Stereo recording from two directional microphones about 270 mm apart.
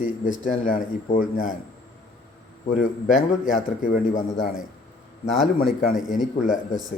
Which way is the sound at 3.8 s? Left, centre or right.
Left.